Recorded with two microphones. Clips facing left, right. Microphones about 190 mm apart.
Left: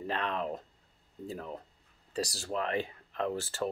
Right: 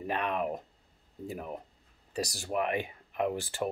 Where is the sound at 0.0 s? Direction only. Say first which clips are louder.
Right 2 dB; 15° right (ahead or behind).